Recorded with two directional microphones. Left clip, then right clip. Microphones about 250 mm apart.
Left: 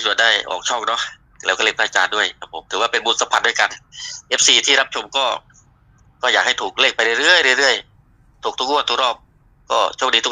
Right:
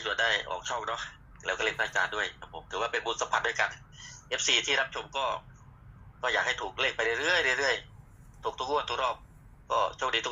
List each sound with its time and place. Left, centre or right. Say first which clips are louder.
0.0 s a man's voice: left 12 dB; left